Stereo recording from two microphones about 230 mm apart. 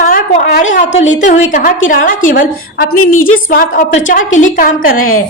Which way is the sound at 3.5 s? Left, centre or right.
Left.